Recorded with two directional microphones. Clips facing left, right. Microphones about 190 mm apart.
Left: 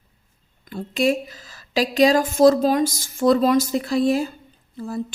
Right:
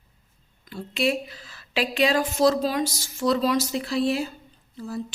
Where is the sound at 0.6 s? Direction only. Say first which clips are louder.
Left 4 dB; 50° left (ahead or behind).